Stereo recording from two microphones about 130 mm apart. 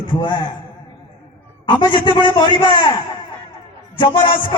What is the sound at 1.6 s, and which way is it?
A man's voice, 40° left (ahead or behind).